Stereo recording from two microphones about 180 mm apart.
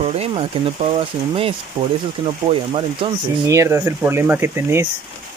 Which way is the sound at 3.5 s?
15° right (ahead or behind).